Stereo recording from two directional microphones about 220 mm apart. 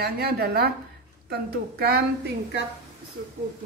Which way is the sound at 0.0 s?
45° right (ahead or behind).